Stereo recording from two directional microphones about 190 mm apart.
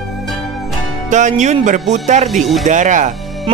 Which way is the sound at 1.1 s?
40° right (ahead or behind).